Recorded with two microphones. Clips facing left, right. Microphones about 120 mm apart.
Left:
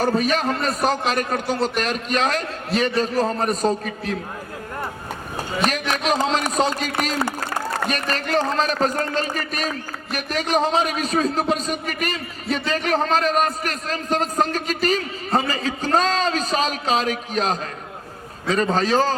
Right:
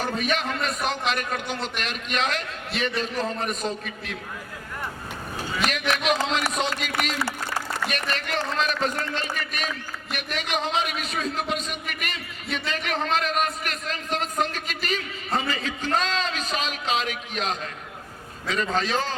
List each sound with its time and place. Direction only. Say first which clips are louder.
0.0 s speech: left 6 dB; 40° left (ahead or behind)
5.5 s speech: left 3 dB; 35° left (ahead or behind)